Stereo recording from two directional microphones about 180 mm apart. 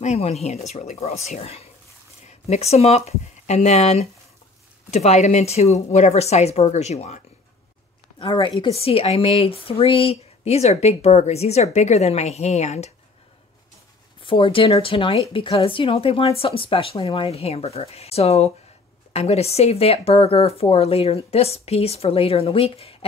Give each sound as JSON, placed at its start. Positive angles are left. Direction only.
{"t": 0.0, "sound": "speech", "side_deg": 35}
{"t": 8.2, "sound": "speech", "side_deg": 30}
{"t": 14.2, "sound": "speech", "side_deg": 30}